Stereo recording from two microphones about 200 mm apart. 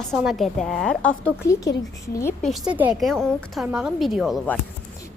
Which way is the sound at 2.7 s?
10° right (ahead or behind).